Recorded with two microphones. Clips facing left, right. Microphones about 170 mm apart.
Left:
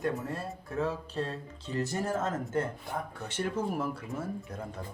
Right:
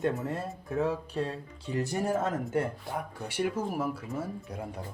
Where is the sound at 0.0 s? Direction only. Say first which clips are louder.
Right 2 dB; 20° right (ahead or behind).